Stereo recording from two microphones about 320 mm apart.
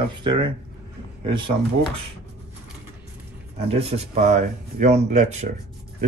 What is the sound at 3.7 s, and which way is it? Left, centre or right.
Speech, centre.